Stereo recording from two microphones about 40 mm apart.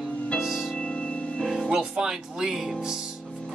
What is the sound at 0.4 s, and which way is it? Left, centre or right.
Music, centre.